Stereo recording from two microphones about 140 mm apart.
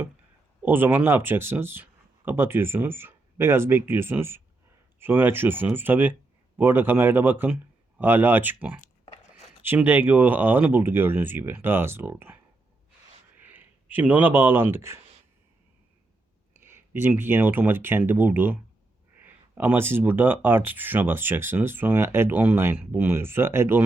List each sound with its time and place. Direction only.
0.6 s speech: 15° right (ahead or behind)
13.4 s speech: 15° right (ahead or behind)
16.6 s speech: 15° right (ahead or behind)